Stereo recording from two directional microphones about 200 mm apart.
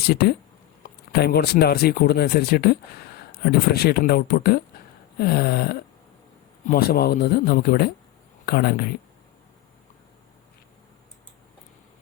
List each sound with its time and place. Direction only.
0.0 s speech: 55° left (ahead or behind)